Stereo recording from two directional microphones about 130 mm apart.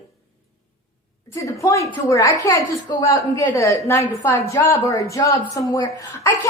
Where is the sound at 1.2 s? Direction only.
25° left (ahead or behind).